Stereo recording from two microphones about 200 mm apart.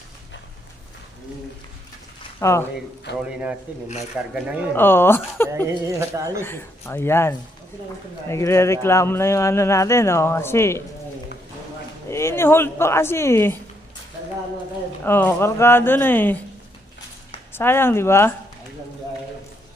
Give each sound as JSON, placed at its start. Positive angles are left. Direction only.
{"t": 2.4, "sound": "speech", "side_deg": 15}
{"t": 3.1, "sound": "a man's voice", "side_deg": 60}
{"t": 3.7, "sound": "speech", "side_deg": -10}
{"t": 4.7, "sound": "speech", "side_deg": 10}
{"t": 5.5, "sound": "speech", "side_deg": -15}
{"t": 6.4, "sound": "speech", "side_deg": 10}
{"t": 12.1, "sound": "speech", "side_deg": 15}
{"t": 15.0, "sound": "speech", "side_deg": 10}
{"t": 17.5, "sound": "speech", "side_deg": 10}